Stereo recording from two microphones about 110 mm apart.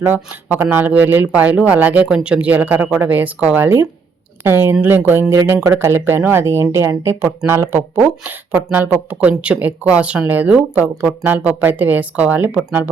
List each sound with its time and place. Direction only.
0.0 s speech: 15° right (ahead or behind)